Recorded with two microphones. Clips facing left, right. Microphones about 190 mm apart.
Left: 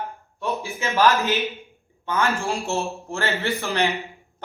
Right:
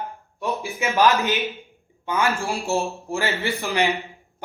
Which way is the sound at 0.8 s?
15° right (ahead or behind).